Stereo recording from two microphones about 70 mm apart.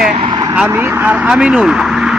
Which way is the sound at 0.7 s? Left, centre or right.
Right.